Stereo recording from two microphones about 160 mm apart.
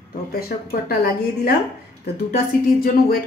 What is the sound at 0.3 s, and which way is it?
A woman's voice, 70° left (ahead or behind).